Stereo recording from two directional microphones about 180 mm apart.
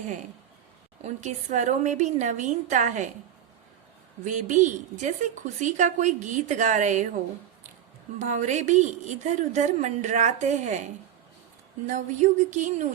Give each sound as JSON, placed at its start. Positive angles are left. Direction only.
{"t": 1.0, "sound": "a woman's voice", "side_deg": -40}
{"t": 4.3, "sound": "a woman's voice", "side_deg": -45}
{"t": 8.2, "sound": "a woman's voice", "side_deg": -40}
{"t": 11.9, "sound": "a woman's voice", "side_deg": -45}